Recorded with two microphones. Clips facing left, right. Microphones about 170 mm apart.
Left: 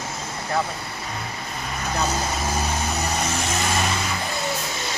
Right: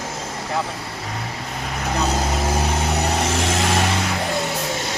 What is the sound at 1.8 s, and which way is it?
Vehicle, 70° right (ahead or behind).